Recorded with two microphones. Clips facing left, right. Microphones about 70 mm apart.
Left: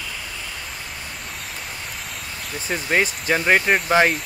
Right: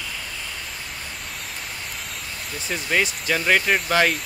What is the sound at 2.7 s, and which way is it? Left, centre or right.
Speech, left.